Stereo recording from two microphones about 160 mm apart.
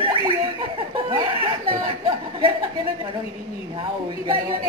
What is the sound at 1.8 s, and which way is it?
Speech, 25° right (ahead or behind).